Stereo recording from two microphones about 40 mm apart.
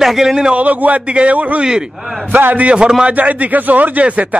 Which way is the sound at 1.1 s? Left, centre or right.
Right.